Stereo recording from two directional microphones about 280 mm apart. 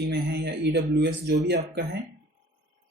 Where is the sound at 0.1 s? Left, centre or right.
Right.